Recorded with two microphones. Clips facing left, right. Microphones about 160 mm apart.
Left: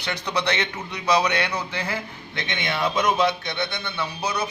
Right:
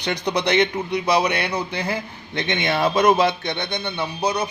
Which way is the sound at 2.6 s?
45° right (ahead or behind).